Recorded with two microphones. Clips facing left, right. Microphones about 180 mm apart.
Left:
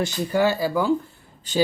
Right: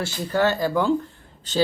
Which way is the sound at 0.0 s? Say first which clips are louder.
Left 1 dB; 10° left (ahead or behind).